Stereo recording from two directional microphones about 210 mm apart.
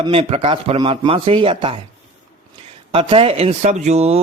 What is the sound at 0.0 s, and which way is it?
Speech, 30° right (ahead or behind).